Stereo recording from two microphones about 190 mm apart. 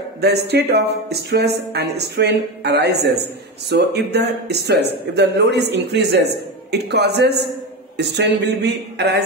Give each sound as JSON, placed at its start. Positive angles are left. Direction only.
{"t": 0.2, "sound": "speech", "side_deg": -60}